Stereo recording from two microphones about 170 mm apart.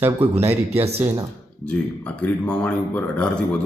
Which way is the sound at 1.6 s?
5° left (ahead or behind).